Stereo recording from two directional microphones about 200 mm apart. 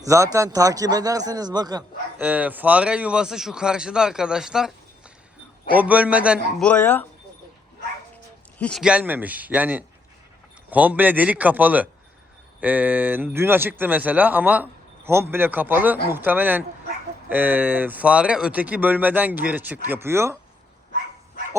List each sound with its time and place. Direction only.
0.0 s speech: 15° right (ahead or behind)
2.2 s a man's voice: 10° right (ahead or behind)
6.7 s speech: 10° left (ahead or behind)
8.5 s a man's voice: 5° left (ahead or behind)
8.8 s speech: 5° right (ahead or behind)